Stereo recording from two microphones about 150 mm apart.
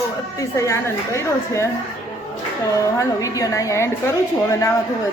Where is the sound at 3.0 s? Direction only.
20° left (ahead or behind).